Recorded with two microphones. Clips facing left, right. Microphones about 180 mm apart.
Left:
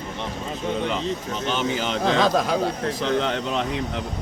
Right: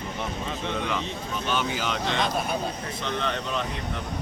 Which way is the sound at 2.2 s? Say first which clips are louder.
Left 7 dB; 90° left.